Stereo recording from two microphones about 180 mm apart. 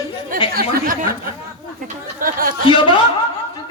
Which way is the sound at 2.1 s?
50° right (ahead or behind).